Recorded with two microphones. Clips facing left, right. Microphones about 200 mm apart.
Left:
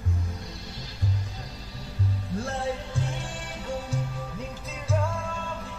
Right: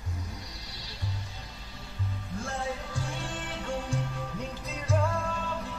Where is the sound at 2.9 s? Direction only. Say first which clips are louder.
Left 3 dB; 15° left (ahead or behind).